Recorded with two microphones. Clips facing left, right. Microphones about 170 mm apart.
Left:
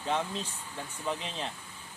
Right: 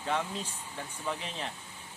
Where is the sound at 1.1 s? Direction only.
20° left (ahead or behind).